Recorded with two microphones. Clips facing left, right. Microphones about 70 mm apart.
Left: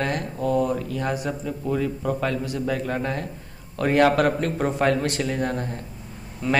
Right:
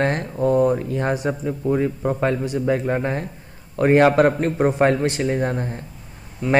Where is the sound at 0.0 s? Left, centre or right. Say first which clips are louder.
Right 5 dB; right.